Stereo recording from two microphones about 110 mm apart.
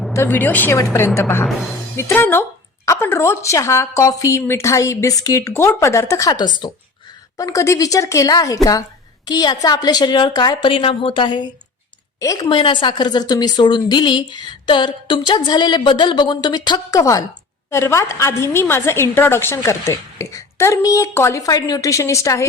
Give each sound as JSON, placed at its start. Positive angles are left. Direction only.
{"t": 0.1, "sound": "a woman's voice", "side_deg": 20}
{"t": 6.3, "sound": "a woman's voice", "side_deg": 45}
{"t": 7.3, "sound": "a woman's voice", "side_deg": 30}
{"t": 10.7, "sound": "a woman's voice", "side_deg": 55}
{"t": 12.2, "sound": "a woman's voice", "side_deg": 30}
{"t": 12.5, "sound": "a woman's voice", "side_deg": 45}
{"t": 17.0, "sound": "a woman's voice", "side_deg": 30}